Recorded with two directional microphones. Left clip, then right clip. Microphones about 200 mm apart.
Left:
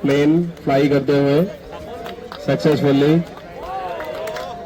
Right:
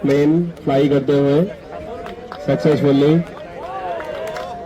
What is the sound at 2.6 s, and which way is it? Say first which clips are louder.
Speech: right 1 dB; 20° left (ahead or behind).